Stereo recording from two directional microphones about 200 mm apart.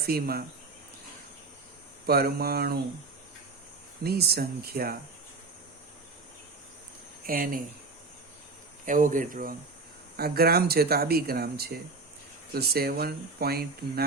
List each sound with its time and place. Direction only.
0.0 s speech: 50° right (ahead or behind)
2.0 s speech: 50° right (ahead or behind)
4.0 s speech: 50° right (ahead or behind)
7.3 s speech: 45° right (ahead or behind)
8.9 s speech: 40° right (ahead or behind)